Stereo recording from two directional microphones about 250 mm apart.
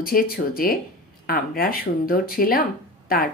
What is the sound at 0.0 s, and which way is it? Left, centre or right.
Speech, left.